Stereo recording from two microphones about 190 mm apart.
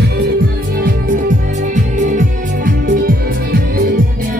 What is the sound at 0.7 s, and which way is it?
Music, 45° right (ahead or behind).